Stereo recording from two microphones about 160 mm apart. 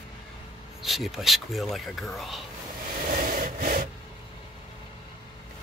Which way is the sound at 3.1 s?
65° right (ahead or behind).